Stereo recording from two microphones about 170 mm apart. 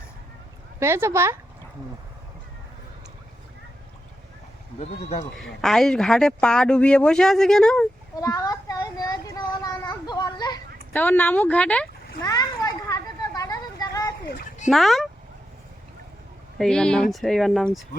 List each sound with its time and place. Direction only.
0.8 s speech: 15° right (ahead or behind)
4.8 s speech: 40° left (ahead or behind)
5.4 s speech: centre (ahead or behind)
8.1 s a sound: 20° left (ahead or behind)
10.9 s speech: 10° left (ahead or behind)
12.2 s a sound: 20° left (ahead or behind)
14.3 s a sound: 55° left (ahead or behind)
14.7 s speech: centre (ahead or behind)
16.6 s speech: 5° left (ahead or behind)